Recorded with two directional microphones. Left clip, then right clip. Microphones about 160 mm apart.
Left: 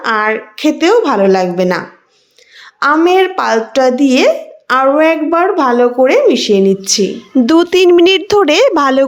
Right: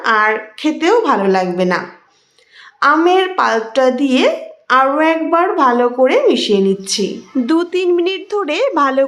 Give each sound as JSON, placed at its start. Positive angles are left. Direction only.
{"t": 0.0, "sound": "a woman's voice", "side_deg": 25}
{"t": 2.8, "sound": "a woman's voice", "side_deg": 30}
{"t": 7.4, "sound": "speech", "side_deg": 45}